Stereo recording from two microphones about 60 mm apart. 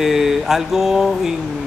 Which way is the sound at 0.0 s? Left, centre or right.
Centre.